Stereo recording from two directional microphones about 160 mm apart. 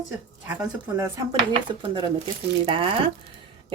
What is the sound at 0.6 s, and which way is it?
Speech, 20° right (ahead or behind).